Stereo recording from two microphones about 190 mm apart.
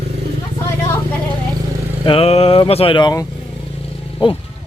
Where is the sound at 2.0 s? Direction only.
30° left (ahead or behind).